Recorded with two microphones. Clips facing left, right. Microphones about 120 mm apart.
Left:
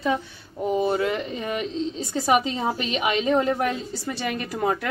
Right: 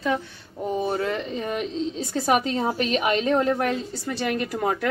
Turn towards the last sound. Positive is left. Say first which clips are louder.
# right 1 dB
turn(degrees=0)  # may be behind; listen again after turning